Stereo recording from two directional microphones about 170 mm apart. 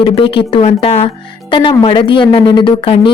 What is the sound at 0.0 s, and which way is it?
Speech, 30° left (ahead or behind).